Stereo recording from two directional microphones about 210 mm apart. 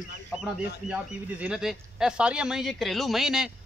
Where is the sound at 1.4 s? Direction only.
5° right (ahead or behind).